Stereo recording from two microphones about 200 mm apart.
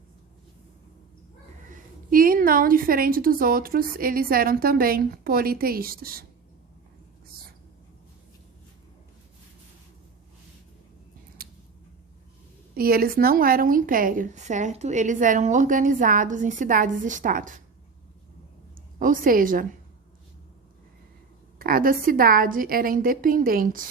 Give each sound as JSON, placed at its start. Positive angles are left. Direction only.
{"t": 1.7, "sound": "a woman's voice", "side_deg": -45}
{"t": 11.4, "sound": "a sound", "side_deg": -50}
{"t": 12.7, "sound": "a woman's voice", "side_deg": -45}
{"t": 18.9, "sound": "a woman's voice", "side_deg": -40}
{"t": 21.6, "sound": "a woman's voice", "side_deg": -45}